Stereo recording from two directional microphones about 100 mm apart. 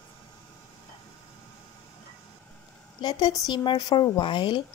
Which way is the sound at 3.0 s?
50° left (ahead or behind).